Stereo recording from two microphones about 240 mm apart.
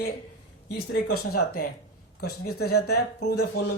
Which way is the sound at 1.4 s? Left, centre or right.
Left.